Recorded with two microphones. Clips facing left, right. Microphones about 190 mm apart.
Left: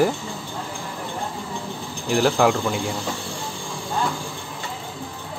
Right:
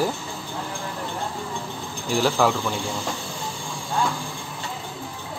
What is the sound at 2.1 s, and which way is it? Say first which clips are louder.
Speech: left 3 dB; 55° left (ahead or behind).